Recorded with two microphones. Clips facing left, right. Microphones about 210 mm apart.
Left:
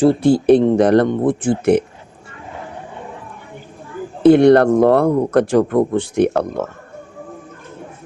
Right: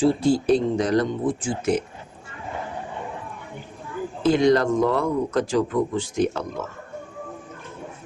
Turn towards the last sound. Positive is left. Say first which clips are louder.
# left 8 dB
turn(degrees=65)  # may be behind; listen again after turning